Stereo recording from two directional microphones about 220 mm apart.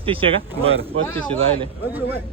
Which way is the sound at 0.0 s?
25° right (ahead or behind).